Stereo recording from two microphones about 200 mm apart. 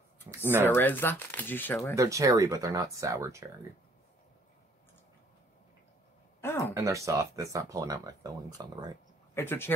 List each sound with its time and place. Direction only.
0.7 s speech: 10° left (ahead or behind)
2.0 s speech: 15° right (ahead or behind)
6.4 s a sound: 10° left (ahead or behind)
6.7 s speech: 15° right (ahead or behind)
9.3 s speech: 10° left (ahead or behind)